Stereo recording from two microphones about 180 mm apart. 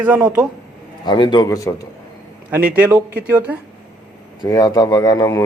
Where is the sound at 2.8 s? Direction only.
10° right (ahead or behind).